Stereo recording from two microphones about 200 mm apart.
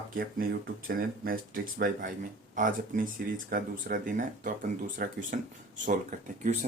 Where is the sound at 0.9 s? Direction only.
45° right (ahead or behind).